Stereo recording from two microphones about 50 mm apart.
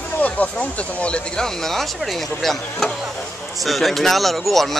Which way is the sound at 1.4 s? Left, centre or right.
Centre.